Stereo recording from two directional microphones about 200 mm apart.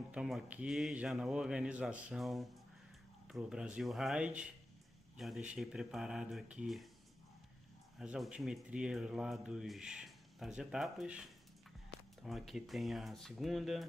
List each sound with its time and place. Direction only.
0.1 s speech: 5° right (ahead or behind)
8.0 s speech: 5° right (ahead or behind)